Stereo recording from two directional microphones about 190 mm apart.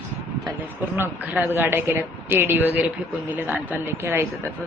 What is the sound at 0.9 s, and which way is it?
A woman's voice, 10° right (ahead or behind).